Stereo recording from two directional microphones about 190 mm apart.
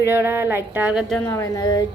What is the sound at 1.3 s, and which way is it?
Speech, 15° left (ahead or behind).